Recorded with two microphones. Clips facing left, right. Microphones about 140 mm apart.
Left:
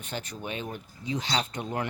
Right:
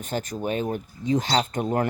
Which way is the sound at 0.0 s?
45° right (ahead or behind).